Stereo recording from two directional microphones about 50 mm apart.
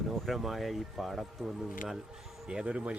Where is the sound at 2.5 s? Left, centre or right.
Right.